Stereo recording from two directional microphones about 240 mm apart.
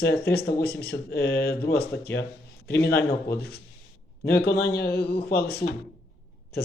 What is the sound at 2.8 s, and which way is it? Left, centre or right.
Speech, left.